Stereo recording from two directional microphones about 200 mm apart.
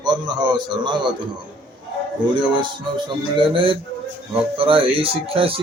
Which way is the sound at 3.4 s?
25° right (ahead or behind).